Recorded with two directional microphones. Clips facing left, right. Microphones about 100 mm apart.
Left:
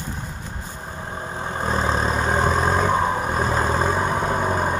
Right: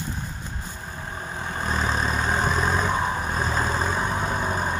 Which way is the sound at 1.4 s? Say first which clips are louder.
Left 4 dB; 35° left (ahead or behind).